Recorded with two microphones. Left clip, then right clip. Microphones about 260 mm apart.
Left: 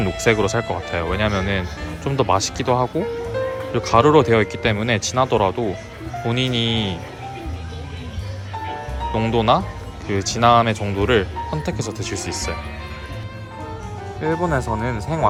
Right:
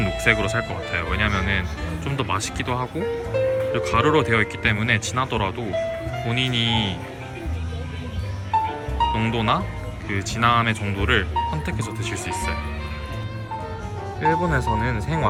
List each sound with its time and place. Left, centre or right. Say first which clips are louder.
0.0 s speech: left 2 dB; centre
9.1 s speech: left 5 dB; centre
14.2 s speech: even; centre